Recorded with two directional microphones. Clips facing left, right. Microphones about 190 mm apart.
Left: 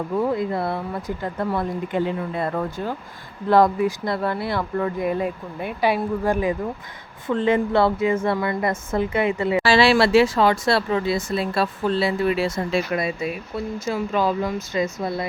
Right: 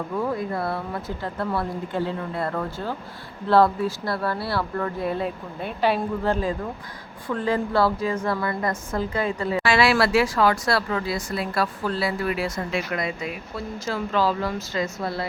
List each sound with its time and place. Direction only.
0.2 s speech: 25° left (ahead or behind)
9.6 s speech: 30° left (ahead or behind)